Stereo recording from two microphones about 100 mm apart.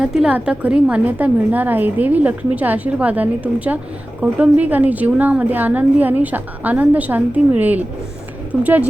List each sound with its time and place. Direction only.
0.0 s a woman's voice: 5° right (ahead or behind)